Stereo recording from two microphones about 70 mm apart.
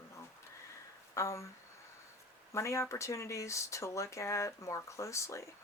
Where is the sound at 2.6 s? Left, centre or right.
Left.